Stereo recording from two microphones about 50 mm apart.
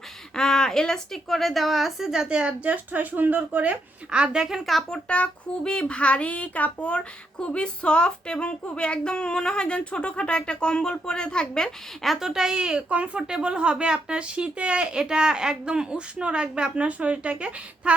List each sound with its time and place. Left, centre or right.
0.3 s a woman's voice: centre
2.3 s speech: right
4.1 s speech: centre
4.9 s speech: left
12.0 s speech: centre; by 17.9 s right